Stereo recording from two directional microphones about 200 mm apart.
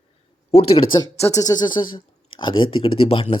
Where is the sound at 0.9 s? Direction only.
20° left (ahead or behind).